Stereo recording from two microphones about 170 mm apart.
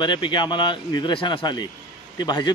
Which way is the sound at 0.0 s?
25° left (ahead or behind).